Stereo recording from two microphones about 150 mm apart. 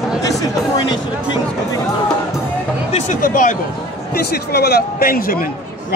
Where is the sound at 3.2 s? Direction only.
65° left (ahead or behind).